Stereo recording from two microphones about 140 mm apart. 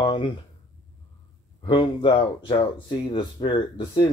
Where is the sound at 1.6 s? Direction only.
35° left (ahead or behind).